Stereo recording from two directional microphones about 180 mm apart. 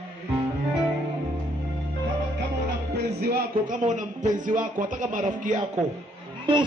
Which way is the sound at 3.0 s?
60° right (ahead or behind).